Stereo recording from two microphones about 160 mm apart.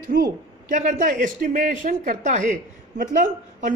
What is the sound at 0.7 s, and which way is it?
Speech, 55° right (ahead or behind).